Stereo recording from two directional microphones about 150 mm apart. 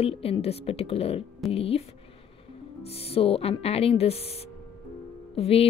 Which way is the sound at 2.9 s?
40° left (ahead or behind).